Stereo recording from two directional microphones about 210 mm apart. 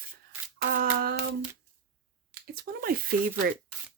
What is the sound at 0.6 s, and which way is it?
Speech, 45° right (ahead or behind).